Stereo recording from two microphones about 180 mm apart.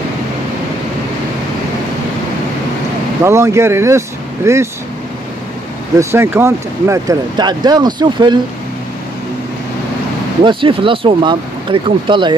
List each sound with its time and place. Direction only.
3.3 s speech: 15° right (ahead or behind)
5.9 s speech: 15° right (ahead or behind)
10.4 s speech: 30° right (ahead or behind)